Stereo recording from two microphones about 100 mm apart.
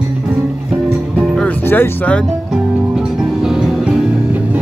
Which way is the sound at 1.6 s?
15° left (ahead or behind).